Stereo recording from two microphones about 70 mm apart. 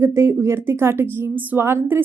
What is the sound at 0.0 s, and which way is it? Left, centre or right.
A woman's voice, right.